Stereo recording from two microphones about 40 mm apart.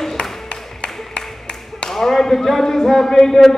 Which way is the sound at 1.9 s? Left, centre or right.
Centre.